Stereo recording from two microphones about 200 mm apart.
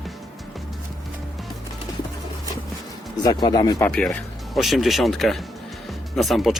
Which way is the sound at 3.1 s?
20° left (ahead or behind).